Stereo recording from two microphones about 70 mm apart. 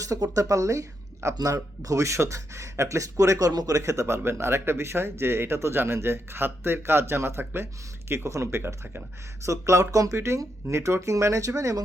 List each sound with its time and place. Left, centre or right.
0.0 s speech: right
1.4 s speech: right
3.3 s speech: right
9.5 s speech: right